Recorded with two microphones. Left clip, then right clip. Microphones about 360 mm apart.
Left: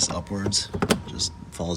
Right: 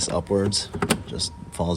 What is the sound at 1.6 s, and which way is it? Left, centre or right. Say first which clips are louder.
Speech: right 4 dB; right.